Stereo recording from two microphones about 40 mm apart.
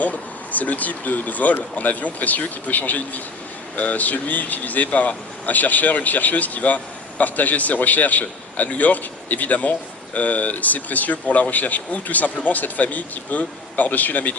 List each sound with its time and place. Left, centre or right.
0.0 s speech: left